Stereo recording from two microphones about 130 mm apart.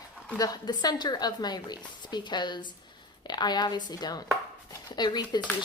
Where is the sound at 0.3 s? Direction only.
30° left (ahead or behind).